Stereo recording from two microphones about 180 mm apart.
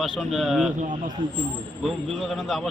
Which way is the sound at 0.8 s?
45° right (ahead or behind).